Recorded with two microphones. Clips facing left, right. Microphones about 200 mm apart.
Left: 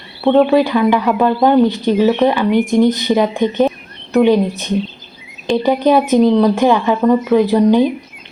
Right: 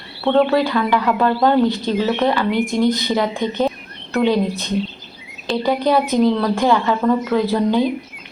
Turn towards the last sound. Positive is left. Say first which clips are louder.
# left 6 dB
turn(degrees=15)  # may be behind; listen again after turning